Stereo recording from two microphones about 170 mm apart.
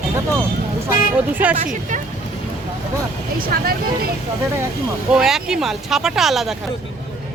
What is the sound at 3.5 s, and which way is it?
Speech, 60° right (ahead or behind).